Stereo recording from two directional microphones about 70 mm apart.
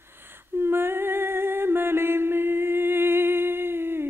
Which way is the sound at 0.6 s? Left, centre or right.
Right.